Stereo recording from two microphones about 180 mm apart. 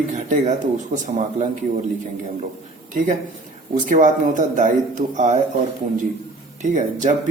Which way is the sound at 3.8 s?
45° right (ahead or behind).